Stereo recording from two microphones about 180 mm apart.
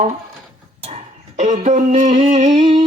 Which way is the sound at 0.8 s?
40° right (ahead or behind).